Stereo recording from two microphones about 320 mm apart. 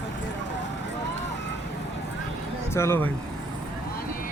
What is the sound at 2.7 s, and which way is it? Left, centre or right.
Speech, centre.